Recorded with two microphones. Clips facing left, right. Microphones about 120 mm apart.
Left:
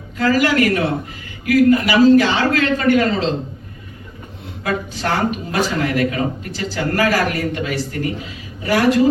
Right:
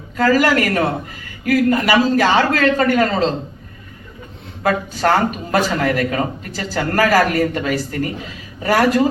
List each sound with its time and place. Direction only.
0.2 s a man's voice: 45° right (ahead or behind)
4.6 s a man's voice: 45° right (ahead or behind)